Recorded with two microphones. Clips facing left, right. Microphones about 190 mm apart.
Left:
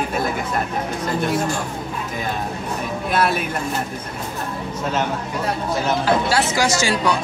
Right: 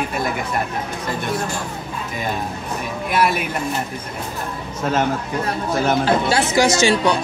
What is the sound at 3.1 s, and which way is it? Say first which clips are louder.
Speech: right 1 dB; 10° right (ahead or behind).